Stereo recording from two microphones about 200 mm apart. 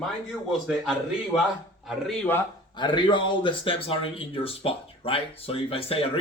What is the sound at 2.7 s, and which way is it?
Speech, 20° left (ahead or behind).